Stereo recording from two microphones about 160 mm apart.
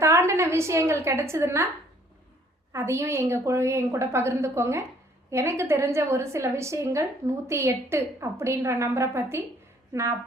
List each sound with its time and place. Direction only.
0.0 s a sound: 15° right (ahead or behind)
1.0 s a woman's voice: 15° right (ahead or behind)
2.7 s a woman's voice: 15° right (ahead or behind)